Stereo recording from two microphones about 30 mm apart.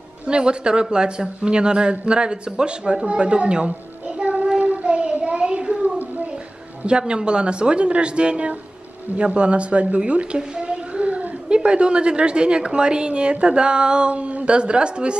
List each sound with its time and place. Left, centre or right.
0.3 s a woman's voice: right
4.2 s child singing: right
4.6 s child singing: right
5.1 s a sound: right
5.4 s a sound: right
6.9 s a woman's voice: right